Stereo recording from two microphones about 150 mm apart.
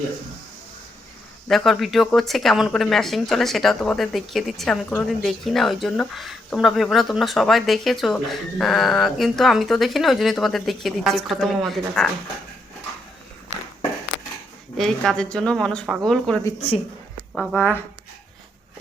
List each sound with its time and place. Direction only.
1.5 s a woman's voice: centre (ahead or behind)
14.8 s a woman's voice: 5° left (ahead or behind)
16.6 s a woman's voice: 40° left (ahead or behind)
17.3 s a woman's voice: 5° left (ahead or behind)